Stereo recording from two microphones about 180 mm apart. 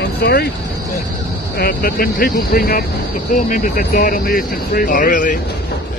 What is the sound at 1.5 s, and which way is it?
Speech, 60° left (ahead or behind).